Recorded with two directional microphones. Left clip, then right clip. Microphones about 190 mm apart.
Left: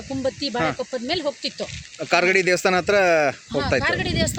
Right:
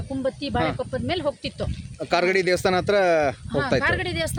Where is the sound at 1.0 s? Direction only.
25° left (ahead or behind).